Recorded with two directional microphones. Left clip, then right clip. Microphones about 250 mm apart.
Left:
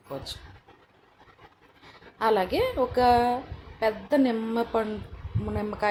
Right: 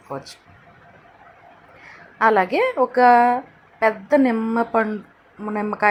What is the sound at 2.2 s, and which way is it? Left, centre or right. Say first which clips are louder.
Speech: right 7 dB; centre.